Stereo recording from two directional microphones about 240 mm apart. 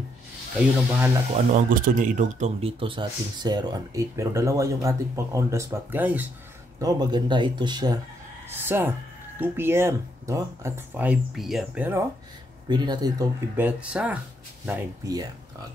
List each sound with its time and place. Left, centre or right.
1.5 s speech: right; by 12.0 s centre
12.6 s speech: centre